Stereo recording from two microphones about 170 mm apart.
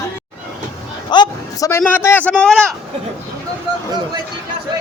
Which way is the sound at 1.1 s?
25° left (ahead or behind).